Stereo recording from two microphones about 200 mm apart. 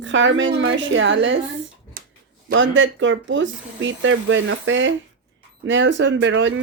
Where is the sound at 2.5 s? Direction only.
70° right (ahead or behind).